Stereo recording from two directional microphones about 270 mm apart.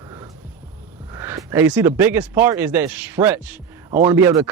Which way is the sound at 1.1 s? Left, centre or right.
Centre.